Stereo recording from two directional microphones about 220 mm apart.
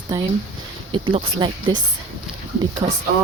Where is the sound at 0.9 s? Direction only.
25° right (ahead or behind).